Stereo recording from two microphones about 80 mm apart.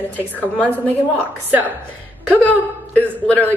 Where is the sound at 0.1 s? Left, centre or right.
Left.